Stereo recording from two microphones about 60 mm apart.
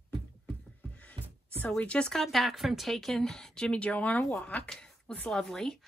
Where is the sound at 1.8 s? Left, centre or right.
Centre.